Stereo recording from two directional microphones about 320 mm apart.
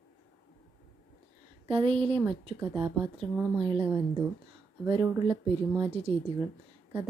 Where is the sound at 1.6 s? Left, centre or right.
Centre.